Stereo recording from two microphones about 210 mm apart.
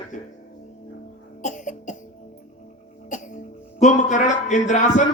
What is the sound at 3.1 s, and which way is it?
Cough, 40° left (ahead or behind).